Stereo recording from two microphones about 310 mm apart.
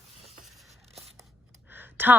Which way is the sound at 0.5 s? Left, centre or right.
Centre.